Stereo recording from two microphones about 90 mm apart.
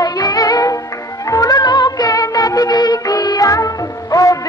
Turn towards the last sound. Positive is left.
turn(degrees=40)  # may be behind; listen again after turning